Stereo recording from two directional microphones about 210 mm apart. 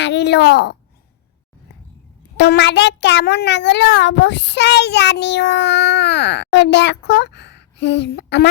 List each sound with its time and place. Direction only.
0.0 s a woman's voice: 55° left (ahead or behind)
2.4 s a child's voice: 55° left (ahead or behind)